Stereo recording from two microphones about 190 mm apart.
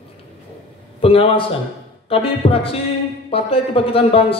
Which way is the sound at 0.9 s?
30° left (ahead or behind).